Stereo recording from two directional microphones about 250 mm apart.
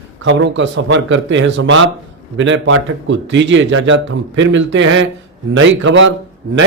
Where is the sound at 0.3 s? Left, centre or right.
Right.